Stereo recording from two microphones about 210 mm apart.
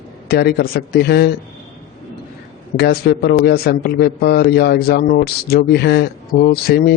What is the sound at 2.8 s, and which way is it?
Speech, 50° left (ahead or behind).